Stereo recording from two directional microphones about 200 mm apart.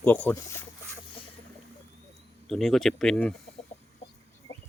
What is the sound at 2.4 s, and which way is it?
Speech, centre (ahead or behind).